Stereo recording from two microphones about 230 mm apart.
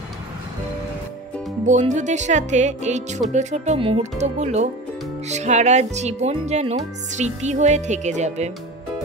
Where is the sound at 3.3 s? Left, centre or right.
Right.